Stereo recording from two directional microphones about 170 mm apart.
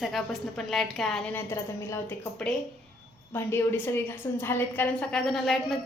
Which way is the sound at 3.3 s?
15° left (ahead or behind).